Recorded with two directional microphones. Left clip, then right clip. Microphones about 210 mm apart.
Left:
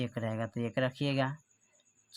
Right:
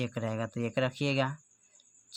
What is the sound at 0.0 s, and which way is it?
Speech, 10° right (ahead or behind).